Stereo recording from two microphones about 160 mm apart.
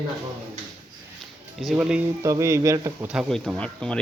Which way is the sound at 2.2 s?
20° right (ahead or behind).